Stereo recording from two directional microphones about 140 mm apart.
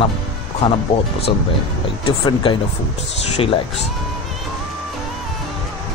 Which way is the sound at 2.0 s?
35° left (ahead or behind).